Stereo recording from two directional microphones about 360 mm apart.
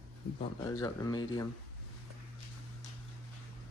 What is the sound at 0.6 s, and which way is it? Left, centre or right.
Speech, centre.